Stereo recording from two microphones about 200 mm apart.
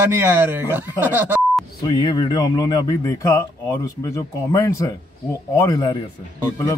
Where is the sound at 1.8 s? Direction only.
20° left (ahead or behind).